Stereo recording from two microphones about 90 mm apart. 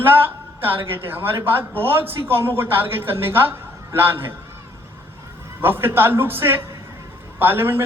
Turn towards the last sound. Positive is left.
turn(degrees=-25)  # may be behind; listen again after turning